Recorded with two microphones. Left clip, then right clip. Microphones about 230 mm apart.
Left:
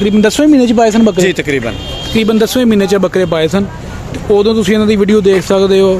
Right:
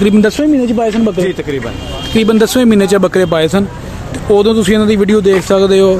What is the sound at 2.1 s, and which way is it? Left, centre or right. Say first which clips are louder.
Speech: right 1 dB; centre.